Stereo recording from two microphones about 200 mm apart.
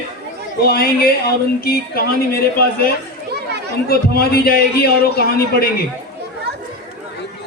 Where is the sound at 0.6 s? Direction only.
50° left (ahead or behind).